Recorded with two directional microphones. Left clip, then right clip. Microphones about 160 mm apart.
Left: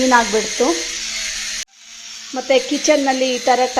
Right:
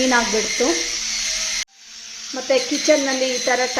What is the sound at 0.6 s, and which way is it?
Speech, 10° left (ahead or behind).